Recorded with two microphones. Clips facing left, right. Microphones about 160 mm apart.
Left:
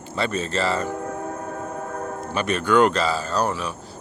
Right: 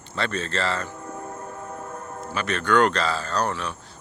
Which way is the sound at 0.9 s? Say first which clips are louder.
Left 7 dB; 70° left (ahead or behind).